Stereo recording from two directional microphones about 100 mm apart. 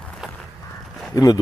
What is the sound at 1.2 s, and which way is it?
Speech, 35° left (ahead or behind).